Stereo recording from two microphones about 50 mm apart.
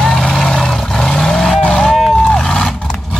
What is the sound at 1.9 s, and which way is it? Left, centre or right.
Vehicle, centre.